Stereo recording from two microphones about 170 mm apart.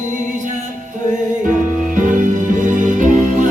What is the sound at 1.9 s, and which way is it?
Music, 50° right (ahead or behind).